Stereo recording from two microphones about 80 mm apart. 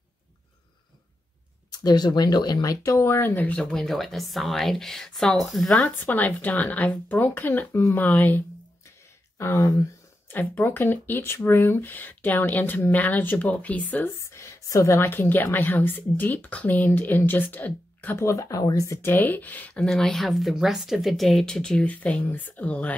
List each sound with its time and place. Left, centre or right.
1.7 s speech: left
3.0 s speech: left
3.7 s a woman's voice: centre
5.9 s speech: left
14.3 s a woman's voice: left
18.2 s speech: left
18.9 s speech: left
19.8 s speech: centre